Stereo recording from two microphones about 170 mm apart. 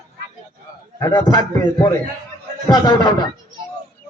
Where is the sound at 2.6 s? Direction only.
25° left (ahead or behind).